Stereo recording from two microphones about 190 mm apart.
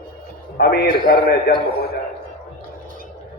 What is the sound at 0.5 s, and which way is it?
Speech, 55° left (ahead or behind).